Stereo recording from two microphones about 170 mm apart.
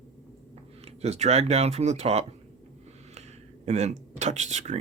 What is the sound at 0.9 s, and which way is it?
Speech, 40° right (ahead or behind).